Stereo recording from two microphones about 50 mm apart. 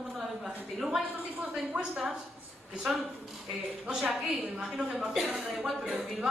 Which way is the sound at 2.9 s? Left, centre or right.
Centre.